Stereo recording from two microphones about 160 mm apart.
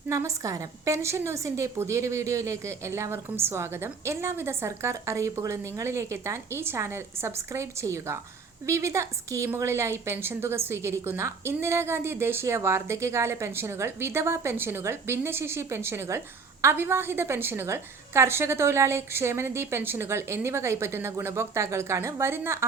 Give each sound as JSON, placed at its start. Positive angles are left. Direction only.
{"t": 0.1, "sound": "a woman's voice", "side_deg": -20}